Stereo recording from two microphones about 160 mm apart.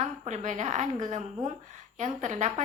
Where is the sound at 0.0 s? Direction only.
45° right (ahead or behind).